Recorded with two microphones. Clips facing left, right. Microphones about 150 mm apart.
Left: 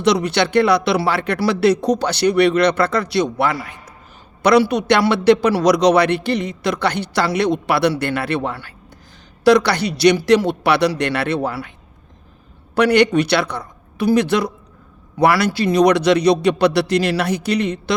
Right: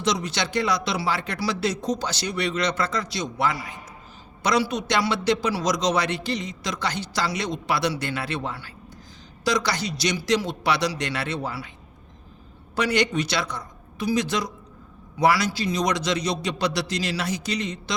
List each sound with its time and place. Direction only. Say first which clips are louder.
0.0 s a man's voice: left 9 dB; 65° left (ahead or behind)
12.7 s a man's voice: left 9 dB; 65° left (ahead or behind)